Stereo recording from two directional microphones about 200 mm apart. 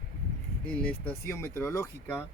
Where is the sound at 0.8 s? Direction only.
5° left (ahead or behind).